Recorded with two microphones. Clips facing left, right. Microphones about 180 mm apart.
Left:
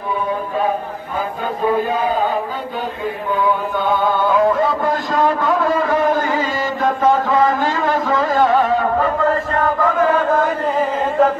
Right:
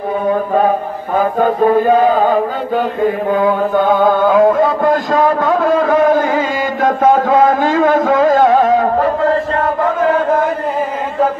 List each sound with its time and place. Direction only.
1.1 s mantra: 50° right (ahead or behind)
4.0 s music: 50° right (ahead or behind)
4.4 s a man's voice: 55° right (ahead or behind)